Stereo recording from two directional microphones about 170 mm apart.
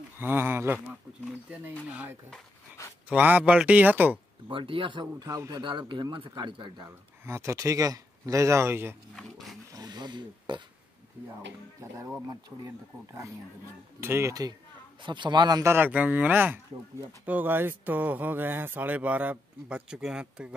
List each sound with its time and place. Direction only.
0.2 s speech: 10° right (ahead or behind)
1.9 s speech: 10° right (ahead or behind)
4.5 s a man's voice: 30° right (ahead or behind)
7.2 s speech: 15° right (ahead or behind)
9.1 s speech: centre (ahead or behind)
9.7 s a sound: 25° right (ahead or behind)
11.8 s speech: 15° right (ahead or behind)